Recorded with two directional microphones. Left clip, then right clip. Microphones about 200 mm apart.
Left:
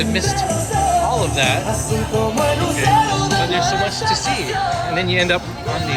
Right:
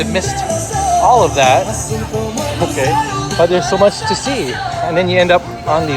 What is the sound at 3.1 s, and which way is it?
Speech, 55° left (ahead or behind).